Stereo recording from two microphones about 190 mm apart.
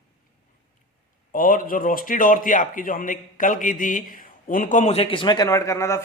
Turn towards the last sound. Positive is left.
turn(degrees=15)  # may be behind; listen again after turning